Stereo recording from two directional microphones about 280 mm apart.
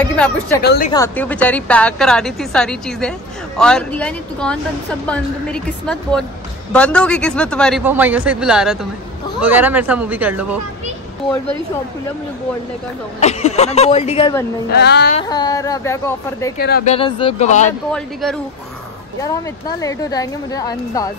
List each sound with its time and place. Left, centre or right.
0.1 s a woman's voice: centre
0.6 s speech: left
0.9 s a woman's voice: centre
13.2 s speech: left
14.7 s speech: left
15.1 s a woman's voice: centre
16.5 s speech: left
16.9 s speech: centre
17.9 s a woman's voice: centre
19.8 s a woman's voice: centre